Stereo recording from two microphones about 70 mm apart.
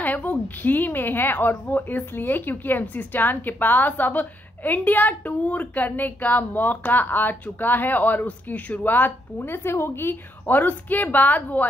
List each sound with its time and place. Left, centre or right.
0.0 s a woman's voice: left